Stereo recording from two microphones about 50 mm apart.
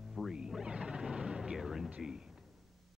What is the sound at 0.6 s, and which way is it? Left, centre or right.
Speech, centre.